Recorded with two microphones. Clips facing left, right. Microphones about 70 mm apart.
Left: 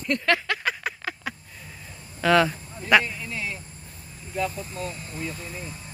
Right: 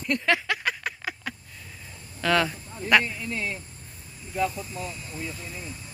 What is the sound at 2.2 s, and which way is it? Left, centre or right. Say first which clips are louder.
Speech: left 4 dB; centre.